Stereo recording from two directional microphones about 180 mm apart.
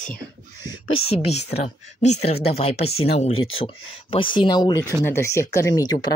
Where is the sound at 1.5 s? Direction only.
40° left (ahead or behind).